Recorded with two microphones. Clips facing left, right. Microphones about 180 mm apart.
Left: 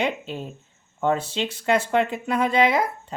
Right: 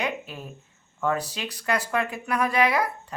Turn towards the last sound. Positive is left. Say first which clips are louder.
# left 3 dB
turn(degrees=25)  # may be behind; listen again after turning